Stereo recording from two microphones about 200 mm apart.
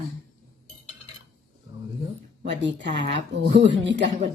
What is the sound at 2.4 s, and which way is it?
Speech, 60° right (ahead or behind).